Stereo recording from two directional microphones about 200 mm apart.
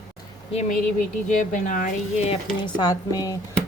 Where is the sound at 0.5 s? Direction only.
40° left (ahead or behind).